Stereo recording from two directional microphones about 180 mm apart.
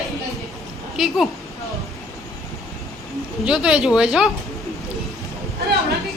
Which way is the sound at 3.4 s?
5° right (ahead or behind).